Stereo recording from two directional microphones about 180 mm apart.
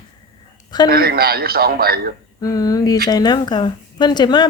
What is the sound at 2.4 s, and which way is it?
A woman's voice, 20° left (ahead or behind).